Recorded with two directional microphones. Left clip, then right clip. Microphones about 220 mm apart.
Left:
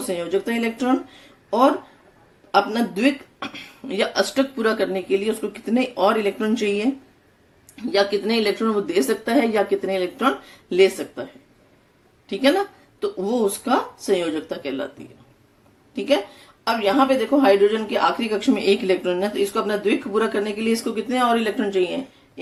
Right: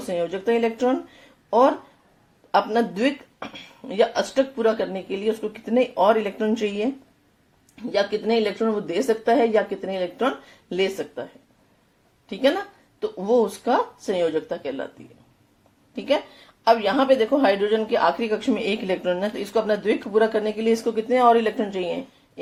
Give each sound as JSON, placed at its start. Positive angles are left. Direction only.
{"t": 0.1, "sound": "speech", "side_deg": -15}
{"t": 7.9, "sound": "speech", "side_deg": -15}
{"t": 12.3, "sound": "speech", "side_deg": -15}
{"t": 16.6, "sound": "speech", "side_deg": -25}